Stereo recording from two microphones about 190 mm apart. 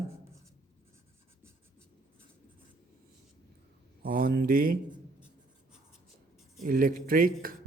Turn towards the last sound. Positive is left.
turn(degrees=-50)  # may be behind; listen again after turning